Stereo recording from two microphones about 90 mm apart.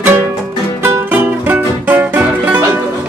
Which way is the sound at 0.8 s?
25° right (ahead or behind).